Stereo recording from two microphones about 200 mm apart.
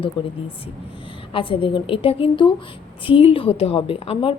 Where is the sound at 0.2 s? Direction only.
25° left (ahead or behind).